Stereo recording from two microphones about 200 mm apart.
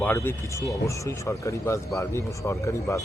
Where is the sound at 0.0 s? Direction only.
10° left (ahead or behind).